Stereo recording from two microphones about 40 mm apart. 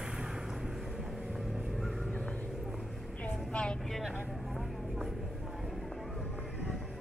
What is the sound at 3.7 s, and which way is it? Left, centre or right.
Vehicle, centre.